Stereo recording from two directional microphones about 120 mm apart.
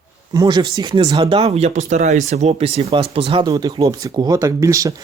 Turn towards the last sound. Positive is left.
turn(degrees=-30)  # may be behind; listen again after turning